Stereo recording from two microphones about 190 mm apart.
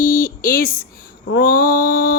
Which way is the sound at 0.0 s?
45° left (ahead or behind).